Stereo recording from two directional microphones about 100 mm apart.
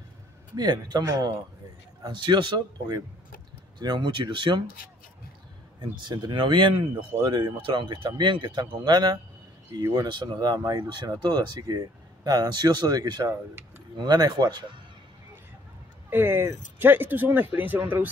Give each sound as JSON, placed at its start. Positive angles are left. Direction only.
{"t": 0.6, "sound": "speech", "side_deg": -45}
{"t": 2.0, "sound": "speech", "side_deg": -50}
{"t": 5.8, "sound": "speech", "side_deg": -45}
{"t": 16.1, "sound": "speech", "side_deg": -20}